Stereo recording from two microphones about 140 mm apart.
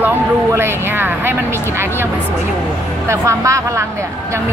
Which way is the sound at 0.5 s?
15° right (ahead or behind).